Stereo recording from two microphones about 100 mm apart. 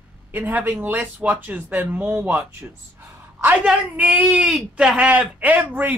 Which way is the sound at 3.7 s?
15° right (ahead or behind).